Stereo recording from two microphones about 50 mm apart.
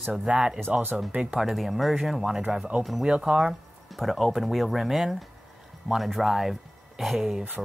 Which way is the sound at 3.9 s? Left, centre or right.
Centre.